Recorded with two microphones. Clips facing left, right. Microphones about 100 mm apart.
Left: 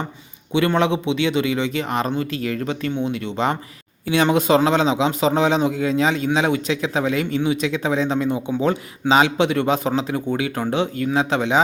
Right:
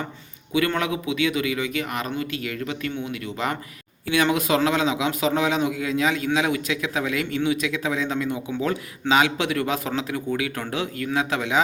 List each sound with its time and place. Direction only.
0.5 s a man's voice: 30° left (ahead or behind)